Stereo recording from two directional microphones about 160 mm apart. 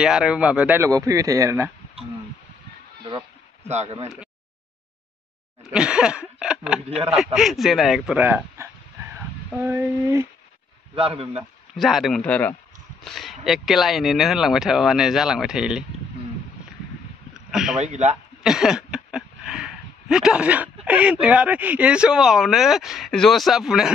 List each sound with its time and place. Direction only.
0.0 s speech: 5° right (ahead or behind)
3.6 s speech: 45° right (ahead or behind)
5.6 s speech: 5° right (ahead or behind)
11.0 s a man's voice: 35° right (ahead or behind)
11.7 s speech: centre (ahead or behind)
17.5 s speech: 5° right (ahead or behind)
17.7 s speech: 45° right (ahead or behind)
18.4 s a sound: 5° right (ahead or behind)
20.8 s speech: 10° right (ahead or behind)